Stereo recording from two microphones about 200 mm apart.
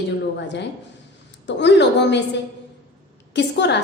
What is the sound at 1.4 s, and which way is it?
Speech, 60° left (ahead or behind).